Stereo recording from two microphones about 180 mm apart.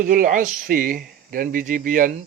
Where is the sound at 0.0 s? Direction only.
50° right (ahead or behind).